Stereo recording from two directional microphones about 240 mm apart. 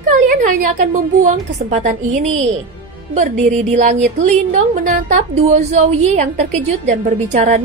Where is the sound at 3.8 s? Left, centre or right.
Right.